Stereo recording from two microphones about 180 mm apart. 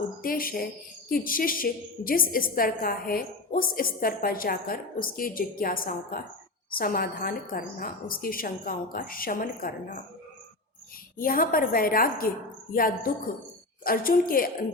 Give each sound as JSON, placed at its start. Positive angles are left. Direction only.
{"t": 0.2, "sound": "speech", "side_deg": 55}
{"t": 11.2, "sound": "speech", "side_deg": 50}